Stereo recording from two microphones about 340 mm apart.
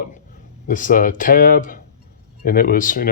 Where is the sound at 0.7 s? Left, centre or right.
Left.